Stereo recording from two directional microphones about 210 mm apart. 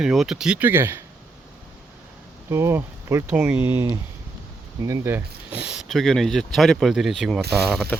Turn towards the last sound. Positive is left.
turn(degrees=-5)  # may be behind; listen again after turning